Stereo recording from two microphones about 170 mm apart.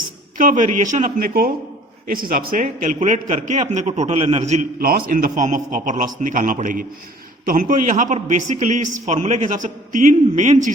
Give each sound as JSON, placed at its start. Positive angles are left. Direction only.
{"t": 0.3, "sound": "a man's voice", "side_deg": -50}
{"t": 4.8, "sound": "a man's voice", "side_deg": -60}